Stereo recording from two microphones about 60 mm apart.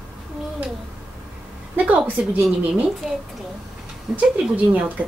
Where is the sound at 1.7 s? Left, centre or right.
Right.